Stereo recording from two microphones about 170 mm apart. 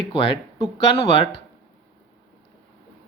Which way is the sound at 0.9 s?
35° left (ahead or behind).